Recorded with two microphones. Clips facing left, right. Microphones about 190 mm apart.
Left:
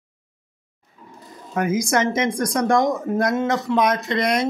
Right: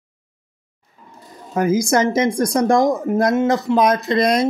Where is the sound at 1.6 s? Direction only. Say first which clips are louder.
Right 4 dB; 30° right (ahead or behind).